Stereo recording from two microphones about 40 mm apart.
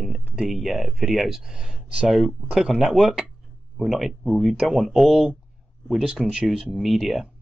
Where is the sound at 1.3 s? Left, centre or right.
Centre.